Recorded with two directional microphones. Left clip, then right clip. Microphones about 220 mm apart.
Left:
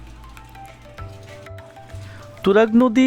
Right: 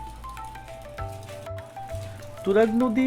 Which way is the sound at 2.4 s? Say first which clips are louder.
Left 6 dB; 35° left (ahead or behind).